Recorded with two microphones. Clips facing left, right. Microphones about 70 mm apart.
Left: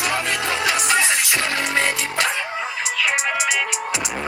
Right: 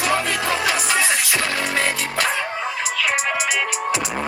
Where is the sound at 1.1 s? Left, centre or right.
Left.